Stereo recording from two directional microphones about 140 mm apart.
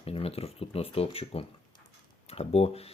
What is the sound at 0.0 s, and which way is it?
Speech, 45° left (ahead or behind).